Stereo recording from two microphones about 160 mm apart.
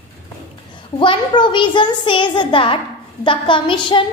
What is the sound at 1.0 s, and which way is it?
A woman's voice, 30° left (ahead or behind).